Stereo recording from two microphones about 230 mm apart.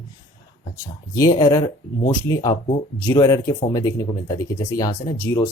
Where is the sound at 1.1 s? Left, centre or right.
Centre.